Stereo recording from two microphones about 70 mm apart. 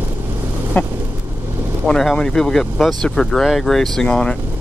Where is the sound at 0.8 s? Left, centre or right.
Left.